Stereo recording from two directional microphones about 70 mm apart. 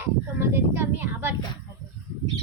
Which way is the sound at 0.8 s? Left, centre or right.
Right.